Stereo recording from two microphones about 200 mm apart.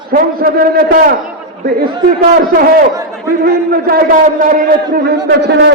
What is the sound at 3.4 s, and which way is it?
A man's voice, 50° right (ahead or behind).